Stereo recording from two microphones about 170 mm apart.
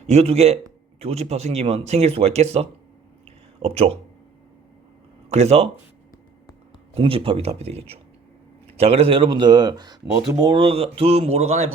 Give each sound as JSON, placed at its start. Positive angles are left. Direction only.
{"t": 0.1, "sound": "speech", "side_deg": -40}
{"t": 3.2, "sound": "a sound", "side_deg": -35}
{"t": 5.3, "sound": "speech", "side_deg": -40}
{"t": 6.9, "sound": "a man's voice", "side_deg": -35}